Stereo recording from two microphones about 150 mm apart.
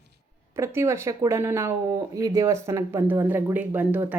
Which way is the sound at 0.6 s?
20° right (ahead or behind).